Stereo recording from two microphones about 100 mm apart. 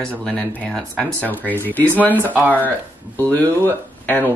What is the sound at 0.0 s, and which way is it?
Speech, 10° left (ahead or behind).